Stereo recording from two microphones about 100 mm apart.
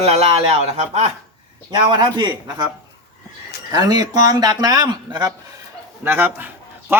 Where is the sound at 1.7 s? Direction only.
45° right (ahead or behind).